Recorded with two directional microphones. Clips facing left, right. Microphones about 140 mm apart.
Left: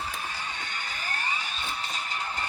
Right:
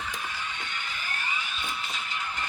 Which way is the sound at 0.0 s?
35° left (ahead or behind).